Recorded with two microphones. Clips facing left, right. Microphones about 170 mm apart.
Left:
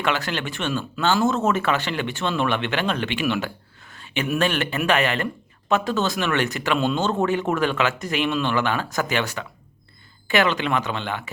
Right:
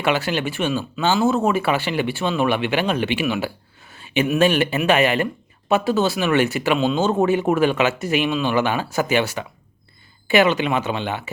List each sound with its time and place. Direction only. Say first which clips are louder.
0.0 s speech: right 4 dB; 15° right (ahead or behind)
0.7 s speech: left 1 dB; 5° right (ahead or behind)
6.7 s speech: even; 5° right (ahead or behind)
7.1 s speech: right 4 dB; 15° right (ahead or behind)